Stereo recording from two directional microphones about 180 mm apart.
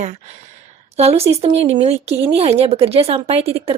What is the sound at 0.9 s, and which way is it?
Speech, 35° right (ahead or behind).